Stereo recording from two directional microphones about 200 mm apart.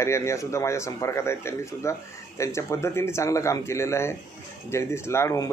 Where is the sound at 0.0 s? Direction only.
15° left (ahead or behind).